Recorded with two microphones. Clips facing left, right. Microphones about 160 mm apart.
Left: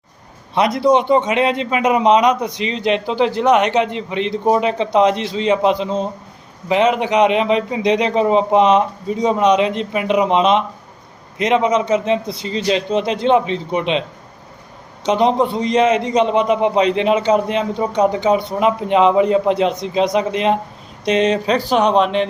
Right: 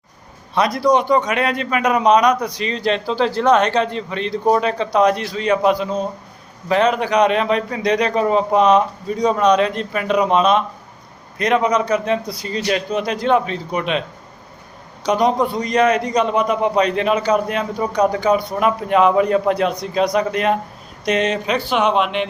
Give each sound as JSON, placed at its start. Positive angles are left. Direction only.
{"t": 0.5, "sound": "a man's voice", "side_deg": 25}
{"t": 15.0, "sound": "a man's voice", "side_deg": 25}